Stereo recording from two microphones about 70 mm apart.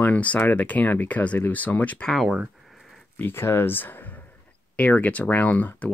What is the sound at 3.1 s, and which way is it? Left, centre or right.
Speech, left.